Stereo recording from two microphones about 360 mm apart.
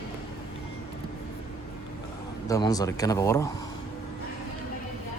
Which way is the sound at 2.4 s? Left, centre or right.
Centre.